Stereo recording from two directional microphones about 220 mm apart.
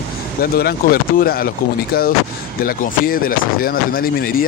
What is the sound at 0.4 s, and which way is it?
Speech, 45° left (ahead or behind).